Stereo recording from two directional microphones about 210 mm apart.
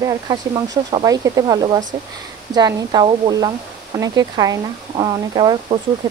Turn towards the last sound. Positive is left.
turn(degrees=-20)  # may be behind; listen again after turning